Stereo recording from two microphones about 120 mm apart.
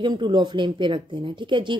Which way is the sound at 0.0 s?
40° right (ahead or behind).